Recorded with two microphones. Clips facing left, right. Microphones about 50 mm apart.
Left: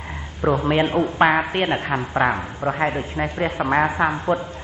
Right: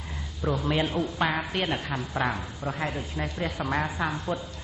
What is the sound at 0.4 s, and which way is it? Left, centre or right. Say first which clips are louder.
A woman's voice: left 8 dB; left.